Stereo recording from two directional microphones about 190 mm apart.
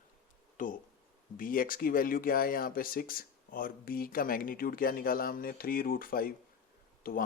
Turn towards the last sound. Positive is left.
turn(degrees=50)  # may be behind; listen again after turning